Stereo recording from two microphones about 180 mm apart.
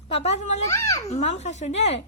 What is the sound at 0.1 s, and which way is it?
Speech, 35° left (ahead or behind).